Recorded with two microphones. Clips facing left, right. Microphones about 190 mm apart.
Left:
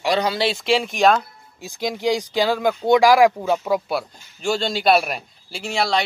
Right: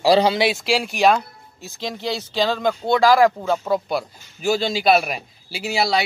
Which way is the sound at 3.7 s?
Centre (ahead or behind).